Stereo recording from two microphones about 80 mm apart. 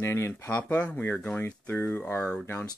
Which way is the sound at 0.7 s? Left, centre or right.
Centre.